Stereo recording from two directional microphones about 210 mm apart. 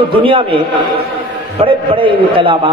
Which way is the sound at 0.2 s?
25° right (ahead or behind).